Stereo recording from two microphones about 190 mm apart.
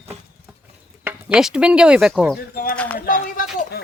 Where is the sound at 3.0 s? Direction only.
45° left (ahead or behind).